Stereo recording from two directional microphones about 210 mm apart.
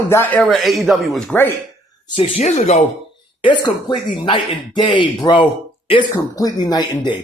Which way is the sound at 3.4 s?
20° left (ahead or behind).